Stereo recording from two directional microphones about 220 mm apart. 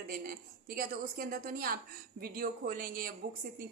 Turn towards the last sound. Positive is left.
turn(degrees=-40)  # may be behind; listen again after turning